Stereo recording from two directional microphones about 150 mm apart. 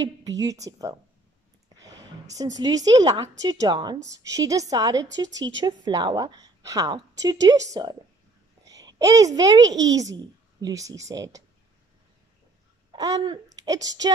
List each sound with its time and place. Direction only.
0.0 s a woman's voice: 25° right (ahead or behind)
1.8 s a sound: 25° right (ahead or behind)
2.6 s a woman's voice: 25° right (ahead or behind)
12.9 s babbling: 25° right (ahead or behind)
13.7 s a woman's voice: 25° right (ahead or behind)